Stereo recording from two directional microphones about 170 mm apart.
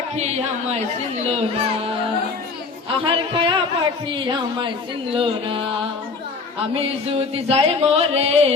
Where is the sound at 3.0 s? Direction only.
30° right (ahead or behind).